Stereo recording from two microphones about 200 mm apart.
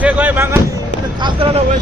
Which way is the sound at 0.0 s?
10° right (ahead or behind).